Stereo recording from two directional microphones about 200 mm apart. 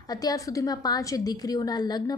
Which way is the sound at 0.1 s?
20° left (ahead or behind).